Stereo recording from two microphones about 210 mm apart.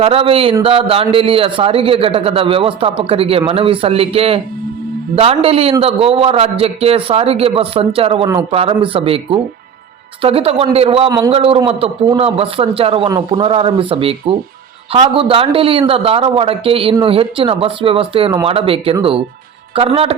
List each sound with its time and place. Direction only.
0.0 s a man's voice: 25° right (ahead or behind)